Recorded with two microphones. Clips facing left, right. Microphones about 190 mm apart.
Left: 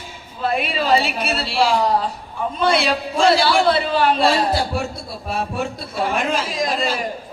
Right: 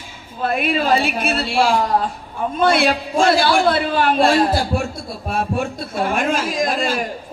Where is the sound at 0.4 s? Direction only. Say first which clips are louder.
Right 2 dB; 50° right (ahead or behind).